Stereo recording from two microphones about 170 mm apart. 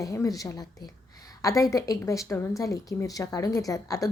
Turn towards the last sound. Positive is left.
turn(degrees=20)  # may be behind; listen again after turning